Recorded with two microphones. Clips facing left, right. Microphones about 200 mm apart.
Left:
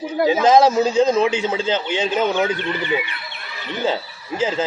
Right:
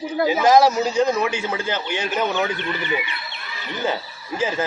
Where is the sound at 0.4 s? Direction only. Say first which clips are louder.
Left 1 dB; 20° left (ahead or behind).